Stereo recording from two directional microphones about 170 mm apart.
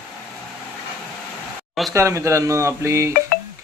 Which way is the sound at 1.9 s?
15° right (ahead or behind).